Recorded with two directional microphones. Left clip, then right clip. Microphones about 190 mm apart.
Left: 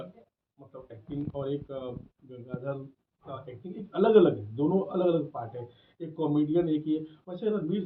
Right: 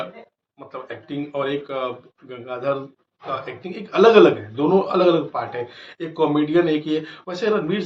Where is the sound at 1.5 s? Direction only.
50° right (ahead or behind).